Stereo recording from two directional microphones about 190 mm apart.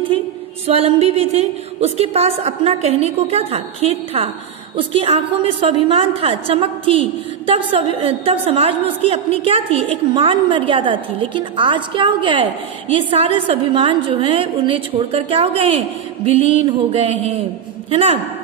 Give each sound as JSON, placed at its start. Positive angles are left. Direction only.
{"t": 0.7, "sound": "a woman's voice", "side_deg": -30}